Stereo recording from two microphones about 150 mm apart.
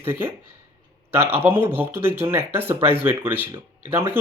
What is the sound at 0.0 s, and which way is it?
Speech, 15° right (ahead or behind).